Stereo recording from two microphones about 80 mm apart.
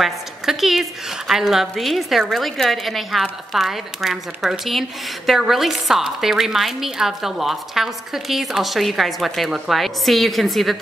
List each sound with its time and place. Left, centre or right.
0.0 s a woman's voice: centre